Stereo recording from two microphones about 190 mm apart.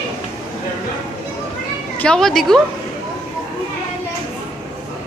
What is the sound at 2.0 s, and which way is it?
Speech, 5° left (ahead or behind).